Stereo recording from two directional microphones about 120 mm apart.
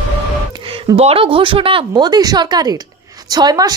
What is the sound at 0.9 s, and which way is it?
A woman's voice, 55° right (ahead or behind).